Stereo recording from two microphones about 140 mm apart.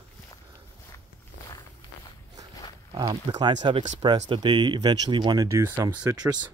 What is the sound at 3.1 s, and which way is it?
Speech, 35° right (ahead or behind).